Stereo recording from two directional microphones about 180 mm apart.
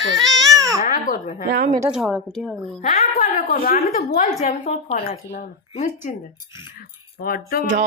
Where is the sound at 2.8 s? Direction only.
45° left (ahead or behind).